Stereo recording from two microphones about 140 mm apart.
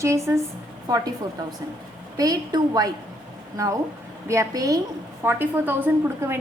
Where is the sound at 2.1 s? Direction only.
25° right (ahead or behind).